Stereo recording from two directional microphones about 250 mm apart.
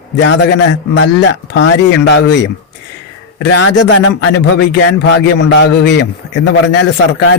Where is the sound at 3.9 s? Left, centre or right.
Left.